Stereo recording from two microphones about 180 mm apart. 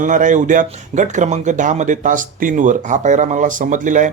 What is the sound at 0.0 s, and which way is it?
Speech, 45° right (ahead or behind).